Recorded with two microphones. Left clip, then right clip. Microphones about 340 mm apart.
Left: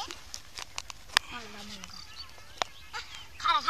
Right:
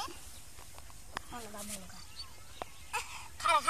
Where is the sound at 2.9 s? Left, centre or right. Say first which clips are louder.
Right 1 dB; centre.